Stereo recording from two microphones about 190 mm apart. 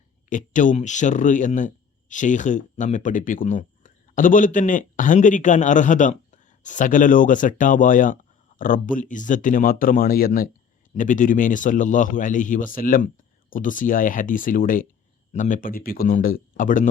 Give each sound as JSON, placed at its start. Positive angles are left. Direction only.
{"t": 0.3, "sound": "speech", "side_deg": 40}